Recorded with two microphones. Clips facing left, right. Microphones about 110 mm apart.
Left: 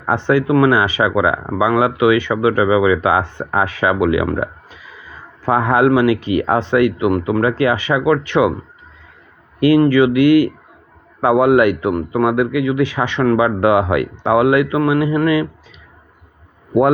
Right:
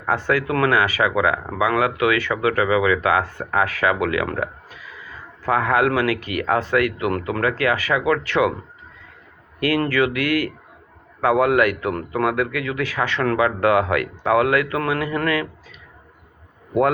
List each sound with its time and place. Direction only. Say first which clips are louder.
0.0 s a man's voice: left 5 dB; 25° left (ahead or behind)
5.4 s a man's voice: left 5 dB; 25° left (ahead or behind)
9.6 s a man's voice: left 8 dB; 20° left (ahead or behind)